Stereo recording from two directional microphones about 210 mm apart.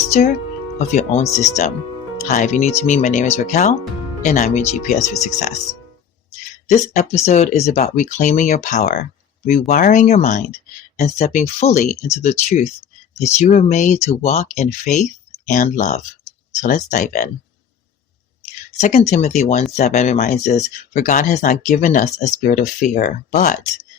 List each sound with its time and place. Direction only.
0.1 s speech: 35° left (ahead or behind)
6.7 s speech: 35° left (ahead or behind)
18.8 s speech: 35° left (ahead or behind)